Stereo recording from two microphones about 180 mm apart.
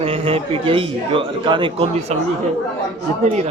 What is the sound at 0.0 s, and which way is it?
A man's voice, 30° right (ahead or behind).